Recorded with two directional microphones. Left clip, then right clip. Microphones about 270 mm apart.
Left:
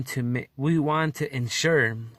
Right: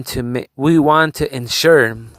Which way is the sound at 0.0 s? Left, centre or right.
Right.